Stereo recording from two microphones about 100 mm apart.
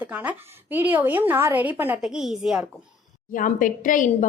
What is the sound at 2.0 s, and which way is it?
Speech, 5° right (ahead or behind).